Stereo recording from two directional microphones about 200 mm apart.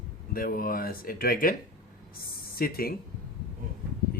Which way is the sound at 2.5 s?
45° left (ahead or behind).